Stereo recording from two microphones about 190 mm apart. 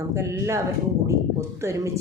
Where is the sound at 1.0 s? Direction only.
15° right (ahead or behind).